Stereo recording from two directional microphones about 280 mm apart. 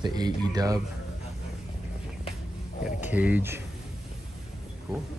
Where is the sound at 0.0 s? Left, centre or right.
Centre.